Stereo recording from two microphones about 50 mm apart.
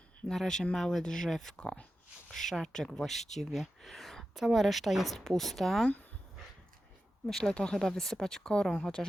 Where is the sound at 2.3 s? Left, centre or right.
Centre.